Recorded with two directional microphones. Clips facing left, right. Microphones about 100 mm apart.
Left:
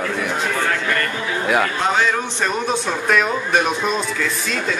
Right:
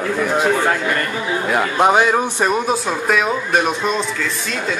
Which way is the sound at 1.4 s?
5° right (ahead or behind).